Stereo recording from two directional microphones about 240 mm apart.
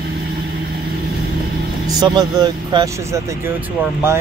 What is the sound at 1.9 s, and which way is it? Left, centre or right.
Speech, centre.